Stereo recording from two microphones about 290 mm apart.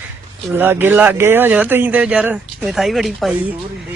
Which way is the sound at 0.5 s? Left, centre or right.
Centre.